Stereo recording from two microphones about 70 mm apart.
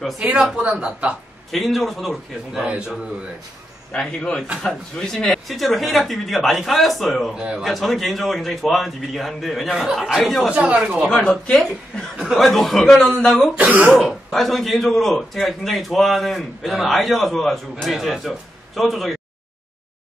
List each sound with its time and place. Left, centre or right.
0.2 s speech: centre
1.5 s a man's voice: centre
3.9 s a man's voice: centre
7.3 s speech: centre
7.6 s a man's voice: centre
10.5 s speech: centre
11.1 s speech: centre
12.2 s a man's voice: centre
13.6 s speech: right
13.9 s a man's voice: centre